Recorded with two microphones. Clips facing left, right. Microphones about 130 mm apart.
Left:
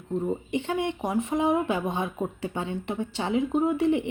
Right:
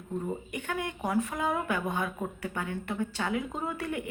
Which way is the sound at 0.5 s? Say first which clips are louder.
Left 7 dB; 25° left (ahead or behind).